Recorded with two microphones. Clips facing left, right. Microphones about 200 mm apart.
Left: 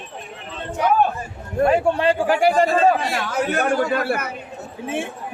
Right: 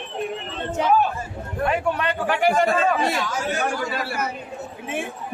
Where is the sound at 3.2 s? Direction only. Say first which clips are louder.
Left 3 dB; 60° left (ahead or behind).